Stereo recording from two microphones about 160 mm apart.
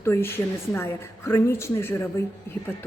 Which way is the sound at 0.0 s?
15° left (ahead or behind).